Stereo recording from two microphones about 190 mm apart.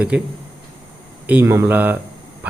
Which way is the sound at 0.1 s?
5° right (ahead or behind).